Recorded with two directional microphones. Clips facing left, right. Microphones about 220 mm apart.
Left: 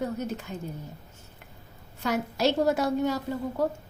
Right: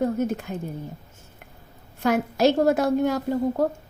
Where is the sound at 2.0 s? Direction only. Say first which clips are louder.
Right 6 dB; 55° right (ahead or behind).